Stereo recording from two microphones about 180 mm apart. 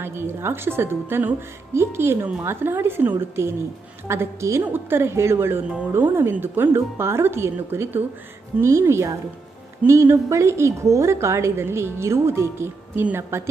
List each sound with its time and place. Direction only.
0.0 s a woman's voice: 15° right (ahead or behind)